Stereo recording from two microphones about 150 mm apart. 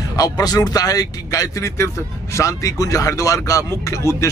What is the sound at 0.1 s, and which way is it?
Speech, 25° left (ahead or behind).